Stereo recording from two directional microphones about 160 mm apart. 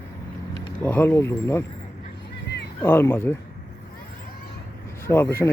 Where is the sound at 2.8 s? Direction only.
15° left (ahead or behind).